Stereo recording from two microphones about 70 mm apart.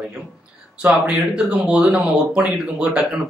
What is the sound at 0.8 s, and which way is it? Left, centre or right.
Speech, centre.